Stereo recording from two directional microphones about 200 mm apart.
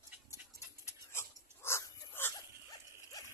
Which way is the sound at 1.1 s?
10° left (ahead or behind).